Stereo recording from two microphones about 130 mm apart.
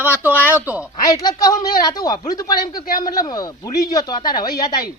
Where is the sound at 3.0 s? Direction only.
30° left (ahead or behind).